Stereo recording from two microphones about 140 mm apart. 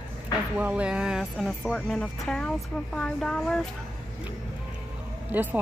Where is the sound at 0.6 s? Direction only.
10° right (ahead or behind).